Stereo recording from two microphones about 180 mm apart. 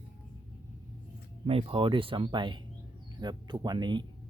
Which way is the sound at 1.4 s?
35° right (ahead or behind).